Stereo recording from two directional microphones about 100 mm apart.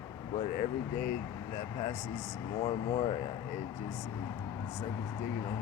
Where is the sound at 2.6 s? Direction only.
55° left (ahead or behind).